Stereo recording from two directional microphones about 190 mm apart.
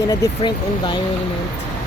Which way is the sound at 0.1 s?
20° left (ahead or behind).